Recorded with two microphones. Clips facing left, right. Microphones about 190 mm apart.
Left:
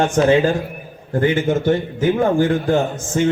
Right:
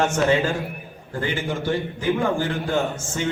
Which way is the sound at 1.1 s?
45° left (ahead or behind).